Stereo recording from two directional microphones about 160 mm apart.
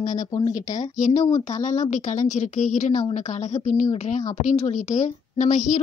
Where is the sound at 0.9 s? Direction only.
50° left (ahead or behind).